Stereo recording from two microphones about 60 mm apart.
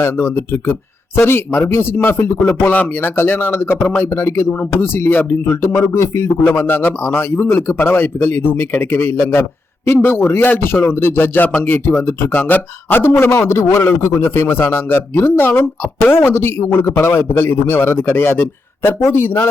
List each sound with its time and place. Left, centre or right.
0.0 s a man's voice: left
2.6 s speech: left
3.0 s a man's voice: left